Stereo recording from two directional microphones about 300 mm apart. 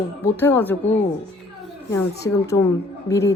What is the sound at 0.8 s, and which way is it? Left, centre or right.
Speech, left.